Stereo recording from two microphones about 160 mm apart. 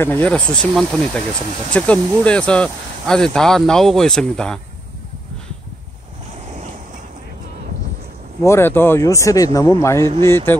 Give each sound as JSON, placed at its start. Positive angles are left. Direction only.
{"t": 0.0, "sound": "speech", "side_deg": 10}
{"t": 8.4, "sound": "speech", "side_deg": 15}